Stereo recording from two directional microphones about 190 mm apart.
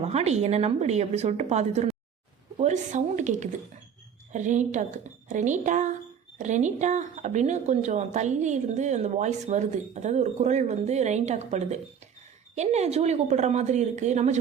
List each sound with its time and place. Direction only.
0.0 s speech: 35° right (ahead or behind)